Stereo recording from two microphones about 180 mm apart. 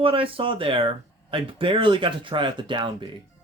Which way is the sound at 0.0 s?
30° right (ahead or behind).